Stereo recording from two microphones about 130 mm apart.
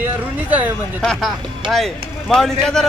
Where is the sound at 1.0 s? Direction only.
5° left (ahead or behind).